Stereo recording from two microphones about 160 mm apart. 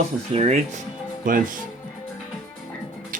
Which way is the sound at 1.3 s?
60° right (ahead or behind).